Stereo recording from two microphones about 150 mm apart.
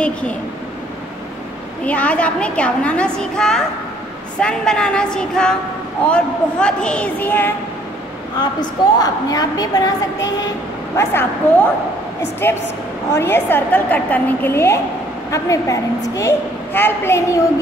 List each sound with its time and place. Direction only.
0.0 s a woman's voice: 10° left (ahead or behind)
1.9 s a woman's voice: 10° left (ahead or behind)
9.0 s a woman's voice: 25° left (ahead or behind)
11.0 s a woman's voice: 15° left (ahead or behind)